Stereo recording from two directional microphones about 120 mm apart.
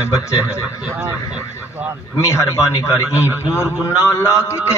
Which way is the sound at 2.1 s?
25° left (ahead or behind).